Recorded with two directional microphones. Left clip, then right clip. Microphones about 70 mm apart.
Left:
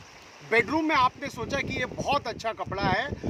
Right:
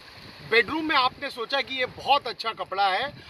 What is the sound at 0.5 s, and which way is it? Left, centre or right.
Speech, left.